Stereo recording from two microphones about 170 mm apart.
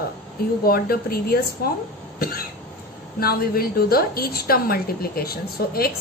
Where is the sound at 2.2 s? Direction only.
60° left (ahead or behind).